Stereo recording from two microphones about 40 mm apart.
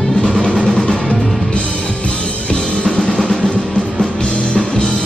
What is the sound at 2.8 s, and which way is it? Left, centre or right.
Music, left.